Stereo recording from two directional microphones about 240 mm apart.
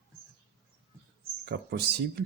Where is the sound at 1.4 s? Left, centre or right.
Right.